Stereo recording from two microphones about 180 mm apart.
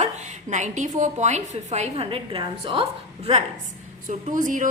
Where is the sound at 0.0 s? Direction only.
40° right (ahead or behind).